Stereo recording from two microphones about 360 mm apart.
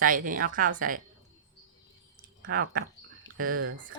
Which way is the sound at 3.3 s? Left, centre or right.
Right.